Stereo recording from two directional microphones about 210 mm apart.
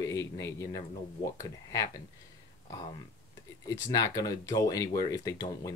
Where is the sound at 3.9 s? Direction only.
15° left (ahead or behind).